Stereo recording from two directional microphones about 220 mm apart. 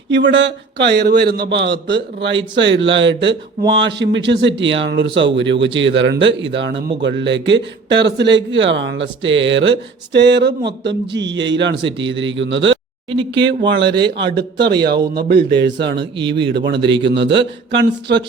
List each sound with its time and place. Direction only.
0.1 s speech: 55° right (ahead or behind)